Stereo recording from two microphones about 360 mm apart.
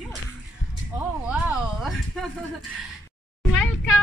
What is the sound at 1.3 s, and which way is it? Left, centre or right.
Speech, centre.